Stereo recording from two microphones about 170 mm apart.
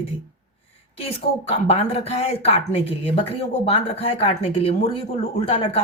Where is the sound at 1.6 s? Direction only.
35° left (ahead or behind).